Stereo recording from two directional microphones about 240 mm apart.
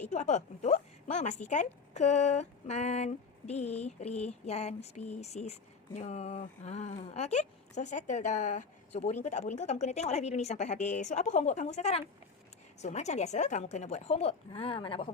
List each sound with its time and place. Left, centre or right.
0.1 s speech: left